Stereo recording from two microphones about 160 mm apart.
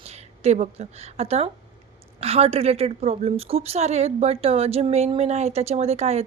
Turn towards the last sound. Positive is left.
turn(degrees=-40)  # may be behind; listen again after turning